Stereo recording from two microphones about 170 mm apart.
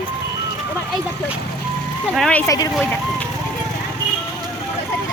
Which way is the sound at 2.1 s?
5° left (ahead or behind).